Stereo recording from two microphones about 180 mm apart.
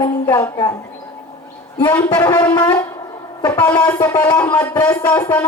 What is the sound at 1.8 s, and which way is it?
Speech, 10° left (ahead or behind).